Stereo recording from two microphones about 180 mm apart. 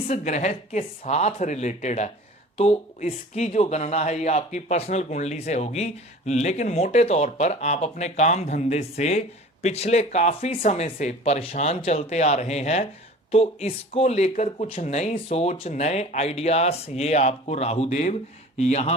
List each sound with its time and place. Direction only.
0.1 s speech: 40° left (ahead or behind)